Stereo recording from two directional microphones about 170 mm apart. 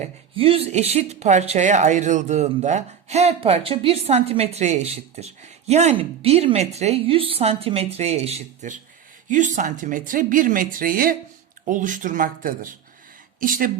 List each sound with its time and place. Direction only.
0.0 s speech: 35° right (ahead or behind); by 13.7 s 55° right (ahead or behind)